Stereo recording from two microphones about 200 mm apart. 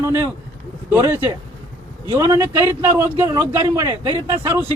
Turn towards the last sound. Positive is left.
turn(degrees=-15)  # may be behind; listen again after turning